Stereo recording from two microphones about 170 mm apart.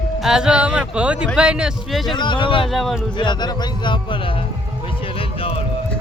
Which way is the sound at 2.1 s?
30° left (ahead or behind).